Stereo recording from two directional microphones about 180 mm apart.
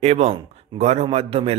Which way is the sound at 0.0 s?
35° right (ahead or behind).